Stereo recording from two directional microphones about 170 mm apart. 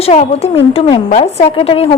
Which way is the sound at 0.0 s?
35° left (ahead or behind).